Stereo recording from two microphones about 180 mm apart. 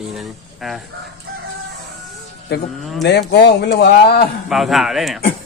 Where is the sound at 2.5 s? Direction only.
65° left (ahead or behind).